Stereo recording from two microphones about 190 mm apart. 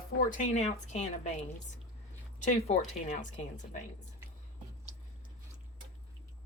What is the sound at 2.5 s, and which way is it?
Speech, 35° left (ahead or behind).